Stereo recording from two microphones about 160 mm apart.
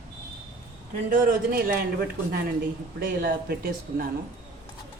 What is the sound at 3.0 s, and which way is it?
Speech, 70° right (ahead or behind).